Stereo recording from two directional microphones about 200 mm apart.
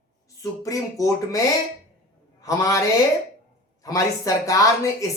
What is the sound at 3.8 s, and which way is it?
A woman's voice, 15° left (ahead or behind).